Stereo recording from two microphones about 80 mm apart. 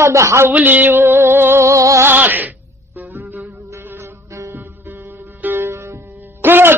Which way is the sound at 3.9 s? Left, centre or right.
Right.